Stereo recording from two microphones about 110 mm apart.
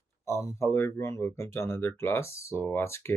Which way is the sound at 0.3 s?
25° left (ahead or behind).